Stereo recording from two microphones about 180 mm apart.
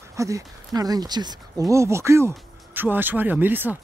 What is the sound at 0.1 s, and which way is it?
Speech, 15° right (ahead or behind).